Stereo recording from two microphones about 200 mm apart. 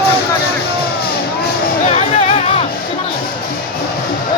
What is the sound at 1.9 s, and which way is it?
Music, 30° left (ahead or behind).